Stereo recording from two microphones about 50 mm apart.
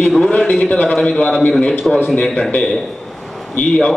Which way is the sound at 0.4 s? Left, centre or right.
Left.